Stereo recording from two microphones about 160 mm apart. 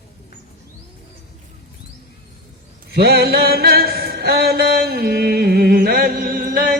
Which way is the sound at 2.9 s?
90° right.